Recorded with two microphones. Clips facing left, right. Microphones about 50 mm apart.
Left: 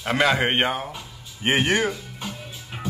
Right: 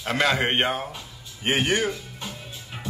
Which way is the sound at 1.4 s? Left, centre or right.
Left.